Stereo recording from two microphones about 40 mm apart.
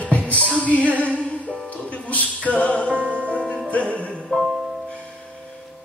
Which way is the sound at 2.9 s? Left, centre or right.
Right.